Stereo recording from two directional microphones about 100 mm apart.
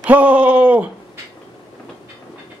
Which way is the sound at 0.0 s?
15° right (ahead or behind).